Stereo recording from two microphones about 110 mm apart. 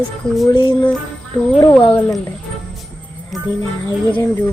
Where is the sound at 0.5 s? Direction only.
45° left (ahead or behind).